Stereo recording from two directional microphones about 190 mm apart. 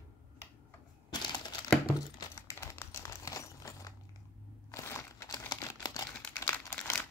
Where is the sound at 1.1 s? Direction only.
20° left (ahead or behind).